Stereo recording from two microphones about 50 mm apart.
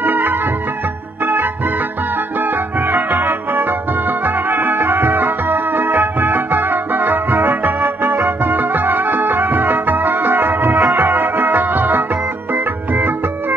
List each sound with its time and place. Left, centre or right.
0.0 s music: right
1.2 s organ: right
2.5 s music: right